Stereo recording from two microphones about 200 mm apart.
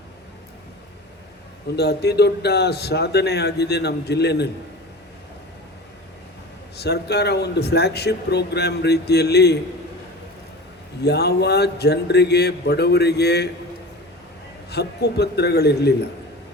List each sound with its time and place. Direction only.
1.7 s a man's voice: 55° left (ahead or behind)
6.7 s a man's voice: 55° left (ahead or behind)
11.0 s a man's voice: 55° left (ahead or behind)
14.7 s a man's voice: 55° left (ahead or behind)